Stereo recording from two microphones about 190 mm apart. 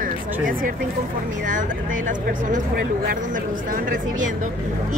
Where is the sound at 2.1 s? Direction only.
45° right (ahead or behind).